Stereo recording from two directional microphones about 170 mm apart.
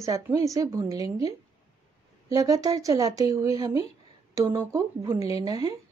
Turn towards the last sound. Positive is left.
turn(degrees=-20)  # may be behind; listen again after turning